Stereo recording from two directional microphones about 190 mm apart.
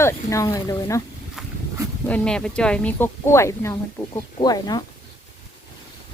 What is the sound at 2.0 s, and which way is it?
Speech, 5° left (ahead or behind).